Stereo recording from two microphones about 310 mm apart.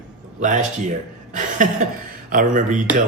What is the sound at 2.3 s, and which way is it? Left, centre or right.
Speech, right.